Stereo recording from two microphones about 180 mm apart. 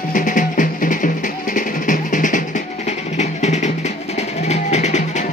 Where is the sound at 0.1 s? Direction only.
45° left (ahead or behind).